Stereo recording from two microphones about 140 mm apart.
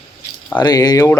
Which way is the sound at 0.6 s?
30° left (ahead or behind).